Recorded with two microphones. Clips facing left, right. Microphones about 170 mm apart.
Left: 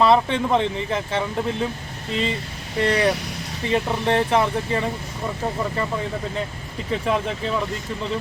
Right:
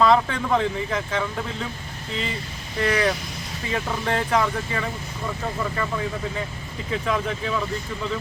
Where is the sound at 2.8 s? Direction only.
30° left (ahead or behind).